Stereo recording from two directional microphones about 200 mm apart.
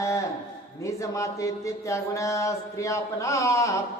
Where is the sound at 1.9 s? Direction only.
15° left (ahead or behind).